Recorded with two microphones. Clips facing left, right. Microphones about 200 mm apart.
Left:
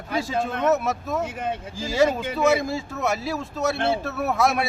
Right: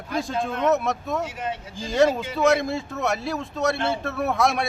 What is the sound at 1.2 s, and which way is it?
Speech, 55° left (ahead or behind).